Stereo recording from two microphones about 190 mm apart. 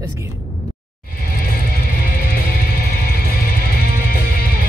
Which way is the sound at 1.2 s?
50° left (ahead or behind).